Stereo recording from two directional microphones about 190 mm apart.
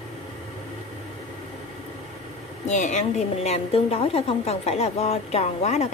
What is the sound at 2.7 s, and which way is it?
A woman's voice, 40° left (ahead or behind).